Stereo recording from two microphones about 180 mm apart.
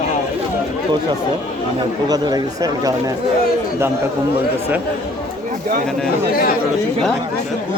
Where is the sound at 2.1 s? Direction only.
20° right (ahead or behind).